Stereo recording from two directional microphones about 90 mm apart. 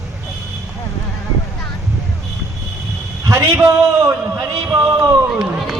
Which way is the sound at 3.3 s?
30° right (ahead or behind).